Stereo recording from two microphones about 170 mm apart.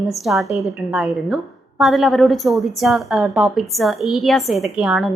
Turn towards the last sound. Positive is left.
turn(degrees=-5)  # may be behind; listen again after turning